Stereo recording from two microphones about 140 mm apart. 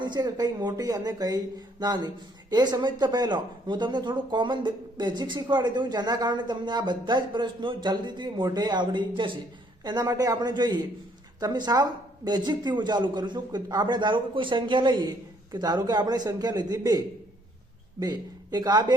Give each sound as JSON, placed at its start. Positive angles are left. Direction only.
{"t": 0.0, "sound": "speech", "side_deg": -30}
{"t": 18.0, "sound": "speech", "side_deg": -30}